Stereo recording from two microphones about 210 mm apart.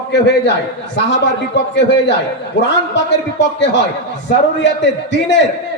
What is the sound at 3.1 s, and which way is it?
A man's voice, 60° left (ahead or behind).